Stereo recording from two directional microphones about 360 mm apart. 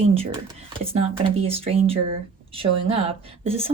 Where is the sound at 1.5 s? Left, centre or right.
Centre.